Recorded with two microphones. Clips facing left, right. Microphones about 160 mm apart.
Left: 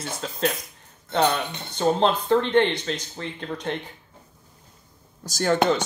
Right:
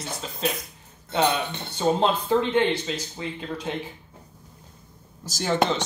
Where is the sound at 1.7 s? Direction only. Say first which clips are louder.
Left 1 dB; 10° right (ahead or behind).